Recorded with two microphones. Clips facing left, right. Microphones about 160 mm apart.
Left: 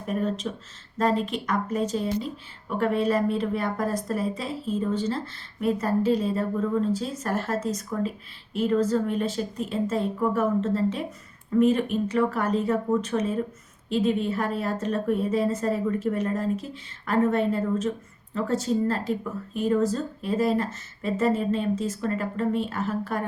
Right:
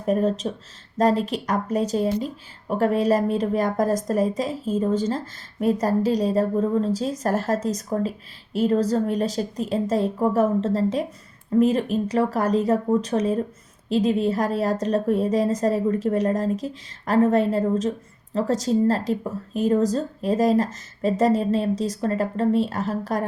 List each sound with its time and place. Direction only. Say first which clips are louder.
0.0 s a woman's voice: right 6 dB; 40° right (ahead or behind)